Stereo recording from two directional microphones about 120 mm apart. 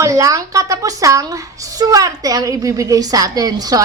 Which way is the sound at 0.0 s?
25° right (ahead or behind).